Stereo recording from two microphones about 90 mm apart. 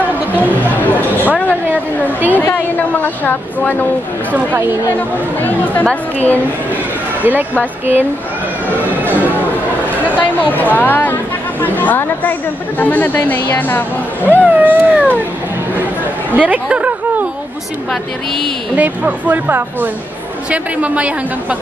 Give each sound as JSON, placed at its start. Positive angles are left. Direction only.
{"t": 0.4, "sound": "chatter", "side_deg": 20}
{"t": 2.0, "sound": "a sound", "side_deg": 20}
{"t": 2.5, "sound": "a woman's voice", "side_deg": 20}
{"t": 5.7, "sound": "a woman's voice", "side_deg": 15}
{"t": 10.1, "sound": "a woman's voice", "side_deg": 20}
{"t": 14.5, "sound": "speech", "side_deg": -20}
{"t": 16.3, "sound": "a sound", "side_deg": -15}
{"t": 18.8, "sound": "a woman's voice", "side_deg": -20}